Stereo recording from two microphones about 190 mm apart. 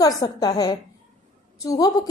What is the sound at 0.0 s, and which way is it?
A woman's voice, 20° left (ahead or behind).